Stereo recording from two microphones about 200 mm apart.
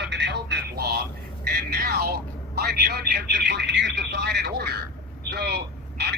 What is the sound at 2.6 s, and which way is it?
A man's voice, 55° right (ahead or behind).